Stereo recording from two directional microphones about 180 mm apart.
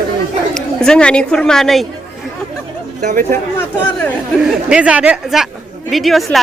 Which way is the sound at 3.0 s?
45° right (ahead or behind).